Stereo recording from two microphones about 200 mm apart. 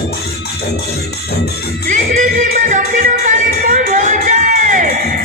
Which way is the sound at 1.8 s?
40° right (ahead or behind).